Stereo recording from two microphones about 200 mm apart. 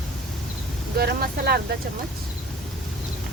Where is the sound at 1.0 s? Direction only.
50° right (ahead or behind).